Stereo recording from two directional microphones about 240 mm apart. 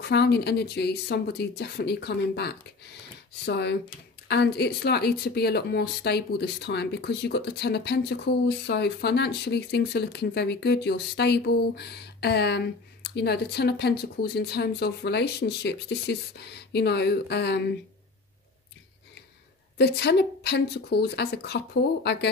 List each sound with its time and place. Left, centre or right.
0.0 s speech: left
19.8 s speech: left